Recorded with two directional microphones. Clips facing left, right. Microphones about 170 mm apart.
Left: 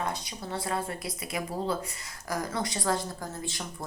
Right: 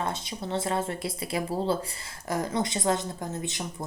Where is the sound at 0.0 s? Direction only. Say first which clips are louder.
Right 2 dB; 25° right (ahead or behind).